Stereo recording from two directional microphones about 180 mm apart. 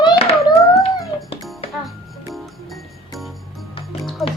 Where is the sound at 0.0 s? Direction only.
35° left (ahead or behind).